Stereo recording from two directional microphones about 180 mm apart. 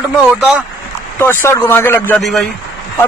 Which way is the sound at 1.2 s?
15° left (ahead or behind).